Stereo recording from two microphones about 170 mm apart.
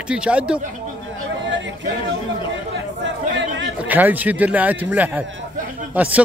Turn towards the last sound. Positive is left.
turn(degrees=-10)  # may be behind; listen again after turning